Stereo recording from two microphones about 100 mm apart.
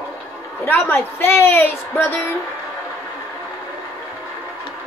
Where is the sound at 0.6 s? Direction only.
25° left (ahead or behind).